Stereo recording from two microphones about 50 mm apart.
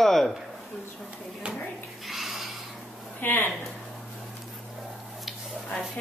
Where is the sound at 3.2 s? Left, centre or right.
Left.